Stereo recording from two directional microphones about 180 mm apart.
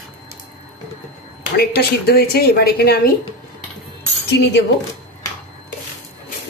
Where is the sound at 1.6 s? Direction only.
60° left (ahead or behind).